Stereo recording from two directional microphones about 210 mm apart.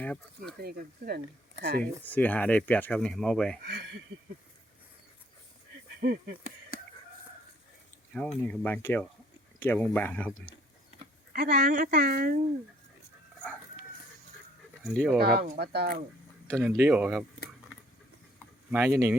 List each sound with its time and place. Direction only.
0.0 s speech: 5° left (ahead or behind)
0.6 s a woman's voice: 45° right (ahead or behind)
1.8 s speech: 5° left (ahead or behind)
3.6 s a woman's voice: 50° right (ahead or behind)
6.0 s a woman's voice: 50° right (ahead or behind)
8.1 s speech: 5° left (ahead or behind)
11.3 s a woman's voice: 50° right (ahead or behind)
14.9 s speech: centre (ahead or behind)
15.2 s a woman's voice: 50° right (ahead or behind)
16.5 s speech: 5° left (ahead or behind)
16.7 s speech: 10° right (ahead or behind)
18.7 s speech: 10° right (ahead or behind)